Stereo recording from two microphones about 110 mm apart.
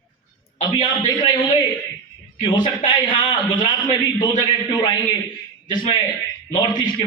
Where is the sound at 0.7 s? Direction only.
45° left (ahead or behind).